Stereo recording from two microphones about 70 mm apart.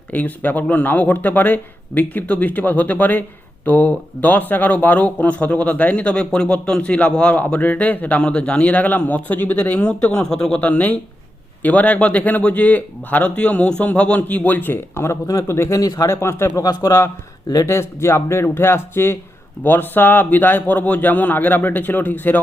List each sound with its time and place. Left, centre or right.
0.1 s speech: left
10.6 s speech: left